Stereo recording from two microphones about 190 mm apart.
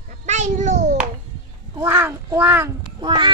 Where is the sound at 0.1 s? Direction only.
40° right (ahead or behind).